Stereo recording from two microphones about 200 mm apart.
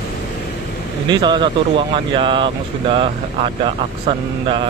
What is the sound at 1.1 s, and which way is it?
Speech, 20° right (ahead or behind).